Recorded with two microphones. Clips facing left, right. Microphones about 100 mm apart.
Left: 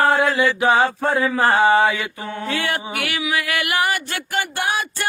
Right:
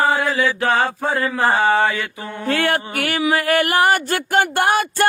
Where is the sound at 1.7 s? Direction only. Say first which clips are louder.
Left 1 dB; 10° left (ahead or behind).